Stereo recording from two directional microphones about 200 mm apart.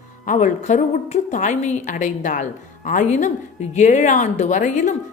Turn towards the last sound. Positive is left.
turn(degrees=40)  # may be behind; listen again after turning